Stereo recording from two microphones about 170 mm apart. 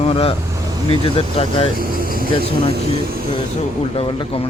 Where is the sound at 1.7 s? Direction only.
60° right (ahead or behind).